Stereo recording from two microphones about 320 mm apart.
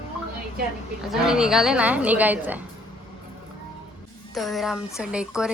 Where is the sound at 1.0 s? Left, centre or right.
Centre.